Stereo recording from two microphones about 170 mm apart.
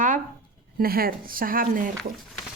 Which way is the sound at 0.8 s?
60° right (ahead or behind).